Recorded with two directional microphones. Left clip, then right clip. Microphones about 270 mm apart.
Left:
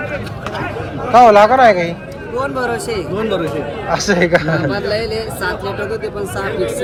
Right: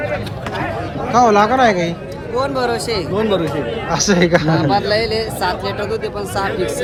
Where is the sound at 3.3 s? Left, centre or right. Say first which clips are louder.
Right 1 dB; right.